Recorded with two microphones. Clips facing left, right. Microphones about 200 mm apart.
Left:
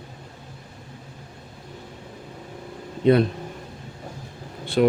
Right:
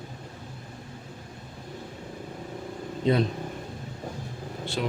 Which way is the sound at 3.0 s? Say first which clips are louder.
Left 7 dB; 60° left (ahead or behind).